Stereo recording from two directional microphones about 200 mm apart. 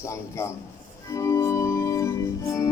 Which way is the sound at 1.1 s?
15° left (ahead or behind).